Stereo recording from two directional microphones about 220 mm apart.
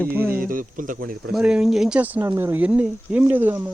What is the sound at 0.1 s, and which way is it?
Speech, 10° right (ahead or behind).